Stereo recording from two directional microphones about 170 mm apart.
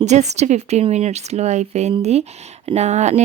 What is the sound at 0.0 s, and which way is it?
A woman's voice, 40° right (ahead or behind).